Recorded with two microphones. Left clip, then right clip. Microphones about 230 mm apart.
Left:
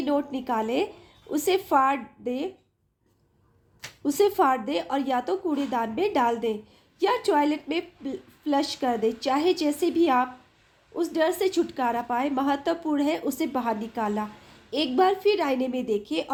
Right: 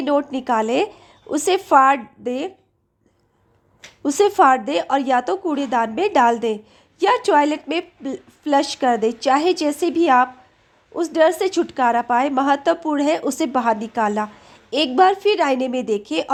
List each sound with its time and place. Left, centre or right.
0.0 s speech: centre
4.0 s speech: centre